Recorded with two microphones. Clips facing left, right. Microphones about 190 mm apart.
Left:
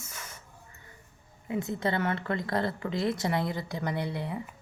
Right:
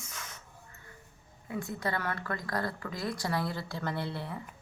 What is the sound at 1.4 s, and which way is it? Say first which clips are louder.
A woman's voice: left 5 dB; 20° left (ahead or behind).